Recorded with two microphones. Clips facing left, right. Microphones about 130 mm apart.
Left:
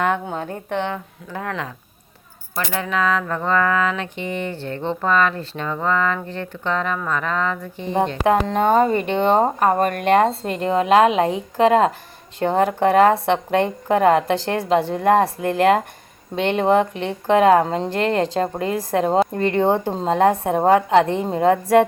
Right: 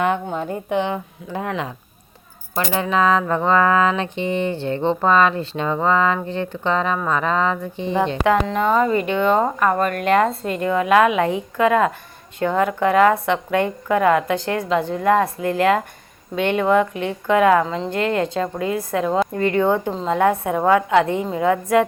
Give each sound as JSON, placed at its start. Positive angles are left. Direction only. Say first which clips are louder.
{"t": 0.0, "sound": "a woman's voice", "louder": "right 1 dB", "side_deg": 0}
{"t": 0.9, "sound": "speech", "louder": "right 3 dB", "side_deg": -20}
{"t": 8.2, "sound": "a woman's voice", "louder": "left 2 dB", "side_deg": 35}